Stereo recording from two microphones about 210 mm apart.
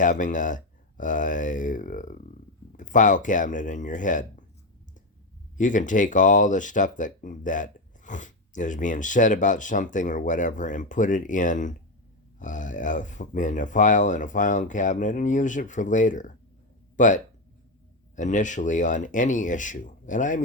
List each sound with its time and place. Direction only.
0.0 s speech: 35° left (ahead or behind)
5.5 s speech: 35° left (ahead or behind)
18.2 s speech: 35° left (ahead or behind)